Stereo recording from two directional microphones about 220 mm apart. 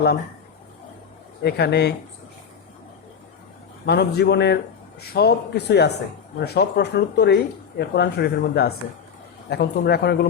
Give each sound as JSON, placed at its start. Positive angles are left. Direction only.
{"t": 1.4, "sound": "speech", "side_deg": 45}
{"t": 3.8, "sound": "speech", "side_deg": 50}